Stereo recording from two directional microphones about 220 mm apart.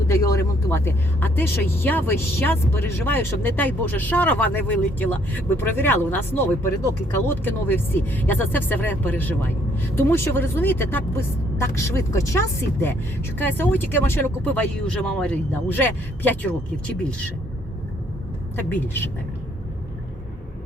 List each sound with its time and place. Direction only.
0.1 s speech: 15° left (ahead or behind)
13.4 s speech: 10° left (ahead or behind)
18.5 s speech: 10° left (ahead or behind)